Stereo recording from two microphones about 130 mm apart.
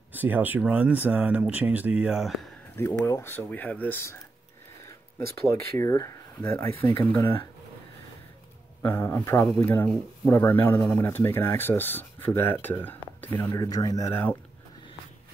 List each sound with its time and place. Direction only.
0.1 s speech: 15° right (ahead or behind)
2.8 s speech: 20° left (ahead or behind)
5.5 s speech: 25° left (ahead or behind)
8.8 s speech: 20° left (ahead or behind)
13.5 s speech: 30° left (ahead or behind)